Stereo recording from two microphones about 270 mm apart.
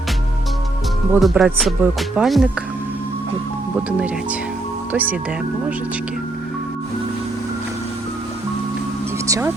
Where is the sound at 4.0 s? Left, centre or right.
Centre.